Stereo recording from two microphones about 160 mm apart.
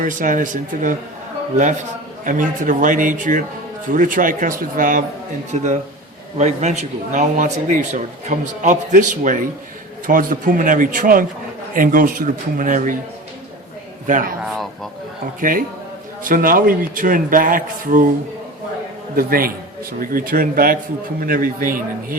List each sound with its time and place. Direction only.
0.0 s a man's voice: 55° right (ahead or behind)
14.1 s speech: 60° right (ahead or behind)
15.4 s speech: 60° right (ahead or behind)
19.1 s speech: 65° right (ahead or behind)